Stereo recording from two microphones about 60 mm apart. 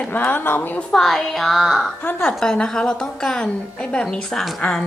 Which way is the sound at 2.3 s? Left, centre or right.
Centre.